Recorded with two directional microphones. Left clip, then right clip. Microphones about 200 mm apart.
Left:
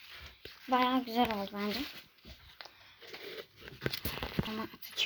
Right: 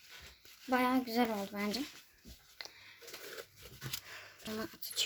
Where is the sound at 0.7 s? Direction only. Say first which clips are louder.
Left 2 dB; 15° right (ahead or behind).